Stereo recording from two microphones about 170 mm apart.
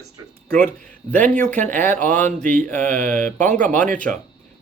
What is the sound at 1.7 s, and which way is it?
Speech, 10° left (ahead or behind).